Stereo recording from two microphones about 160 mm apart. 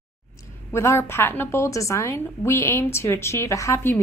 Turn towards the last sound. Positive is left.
turn(degrees=15)  # may be behind; listen again after turning